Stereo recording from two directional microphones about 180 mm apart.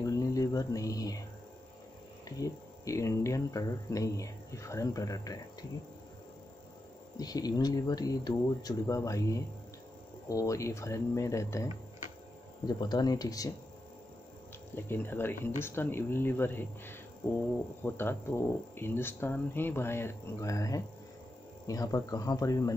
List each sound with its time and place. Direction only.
0.0 s speech: 20° left (ahead or behind)
2.2 s speech: 20° left (ahead or behind)
7.2 s speech: 20° left (ahead or behind)
14.8 s speech: 10° left (ahead or behind)